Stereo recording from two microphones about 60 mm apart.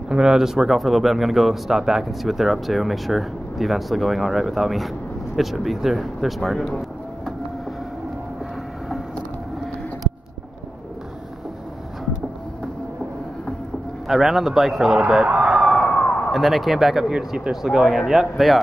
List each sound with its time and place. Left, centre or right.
0.1 s a man's voice: centre
14.0 s a man's voice: centre
15.2 s police car: right
15.5 s police car: centre
15.9 s a sound: centre
16.3 s a man's voice: centre